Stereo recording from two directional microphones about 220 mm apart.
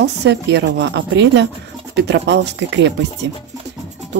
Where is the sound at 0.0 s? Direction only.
50° right (ahead or behind).